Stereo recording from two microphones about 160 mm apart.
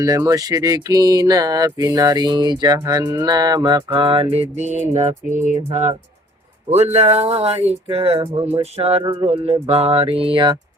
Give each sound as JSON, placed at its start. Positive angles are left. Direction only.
{"t": 0.0, "sound": "a sound", "side_deg": -20}
{"t": 3.9, "sound": "mantra", "side_deg": -35}
{"t": 6.7, "sound": "music", "side_deg": -45}